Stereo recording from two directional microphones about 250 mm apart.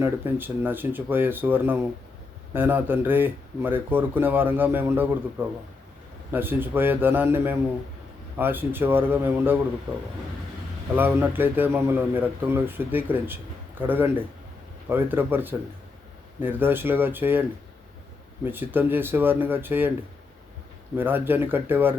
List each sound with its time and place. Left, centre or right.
0.0 s a man's voice: centre
10.9 s a man's voice: centre
18.4 s a man's voice: centre
20.9 s a man's voice: centre